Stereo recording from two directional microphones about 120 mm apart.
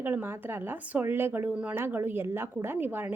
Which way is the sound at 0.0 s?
15° right (ahead or behind).